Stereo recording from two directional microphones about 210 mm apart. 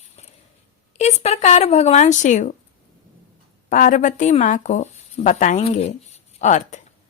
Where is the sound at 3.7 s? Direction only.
35° left (ahead or behind).